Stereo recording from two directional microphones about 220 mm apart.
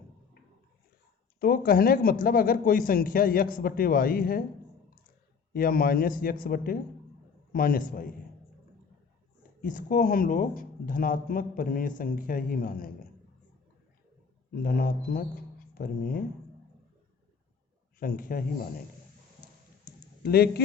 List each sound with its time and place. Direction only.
1.4 s speech: 40° left (ahead or behind)
5.5 s speech: 40° left (ahead or behind)
9.6 s speech: 40° left (ahead or behind)
14.5 s speech: 40° left (ahead or behind)
18.0 s speech: 40° left (ahead or behind)
20.2 s speech: 45° left (ahead or behind)